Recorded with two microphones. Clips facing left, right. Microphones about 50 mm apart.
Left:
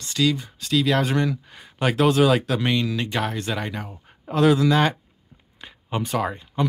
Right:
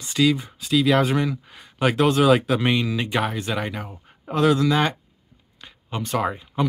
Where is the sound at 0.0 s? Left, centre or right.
Centre.